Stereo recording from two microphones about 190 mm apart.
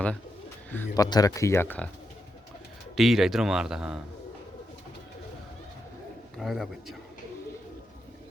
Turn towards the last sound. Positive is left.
turn(degrees=0)  # may be behind; listen again after turning